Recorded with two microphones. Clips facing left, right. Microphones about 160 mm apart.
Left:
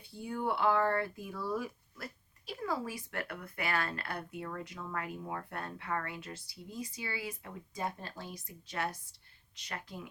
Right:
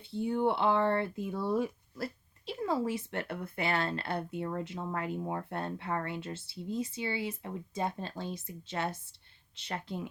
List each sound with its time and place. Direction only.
0.1 s speech: 25° right (ahead or behind)